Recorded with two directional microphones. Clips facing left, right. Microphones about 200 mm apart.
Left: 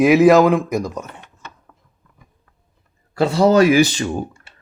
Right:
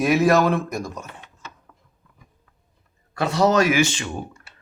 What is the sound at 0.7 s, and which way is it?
Speech, centre (ahead or behind).